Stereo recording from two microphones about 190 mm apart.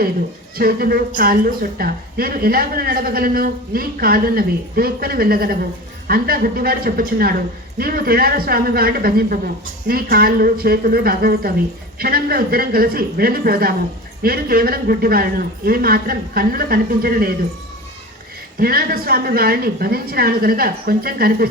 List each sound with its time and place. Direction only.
0.5 s a woman's voice: 50° right (ahead or behind)
18.6 s a woman's voice: 50° right (ahead or behind)